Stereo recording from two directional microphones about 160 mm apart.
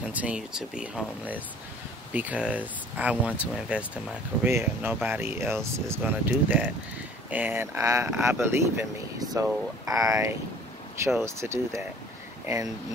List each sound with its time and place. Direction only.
0.1 s speech: 10° right (ahead or behind)